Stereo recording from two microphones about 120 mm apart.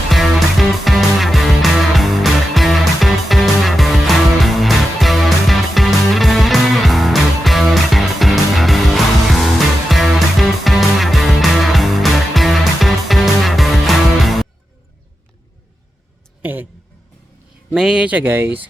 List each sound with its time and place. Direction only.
0.1 s music: centre (ahead or behind)
16.4 s a sound: 15° right (ahead or behind)
17.7 s speech: 5° right (ahead or behind)